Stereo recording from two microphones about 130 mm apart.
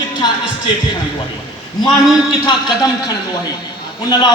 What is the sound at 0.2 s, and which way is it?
Speech, 30° left (ahead or behind).